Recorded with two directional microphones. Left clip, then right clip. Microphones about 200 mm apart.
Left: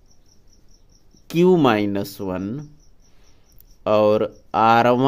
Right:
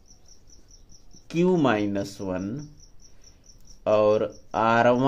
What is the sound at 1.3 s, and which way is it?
Speech, 50° left (ahead or behind).